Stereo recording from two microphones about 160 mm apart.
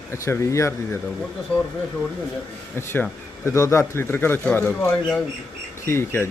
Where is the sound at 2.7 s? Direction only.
15° left (ahead or behind).